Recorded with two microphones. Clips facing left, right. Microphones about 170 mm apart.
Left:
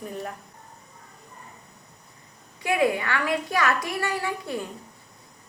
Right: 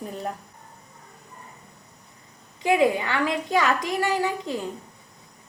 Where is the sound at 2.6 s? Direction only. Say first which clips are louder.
Right 3 dB; 15° right (ahead or behind).